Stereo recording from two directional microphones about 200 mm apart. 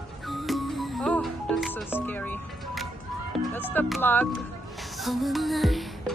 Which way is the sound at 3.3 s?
5° left (ahead or behind).